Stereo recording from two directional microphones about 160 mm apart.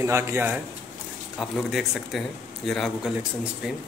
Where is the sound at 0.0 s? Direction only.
15° right (ahead or behind).